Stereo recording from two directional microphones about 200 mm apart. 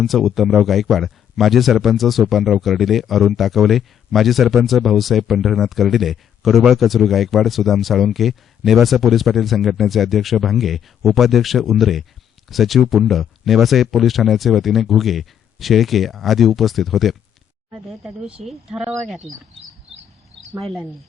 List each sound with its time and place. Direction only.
0.0 s speech: centre (ahead or behind)